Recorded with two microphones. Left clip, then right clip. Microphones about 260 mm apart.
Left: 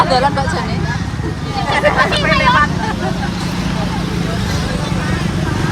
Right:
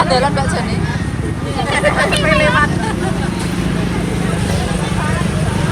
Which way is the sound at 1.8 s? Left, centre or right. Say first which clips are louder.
Left 1 dB; centre.